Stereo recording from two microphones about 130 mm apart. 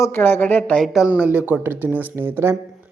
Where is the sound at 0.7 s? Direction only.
Centre (ahead or behind).